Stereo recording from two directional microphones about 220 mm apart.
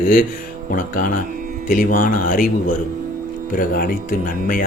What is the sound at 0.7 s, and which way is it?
Speech, 40° left (ahead or behind).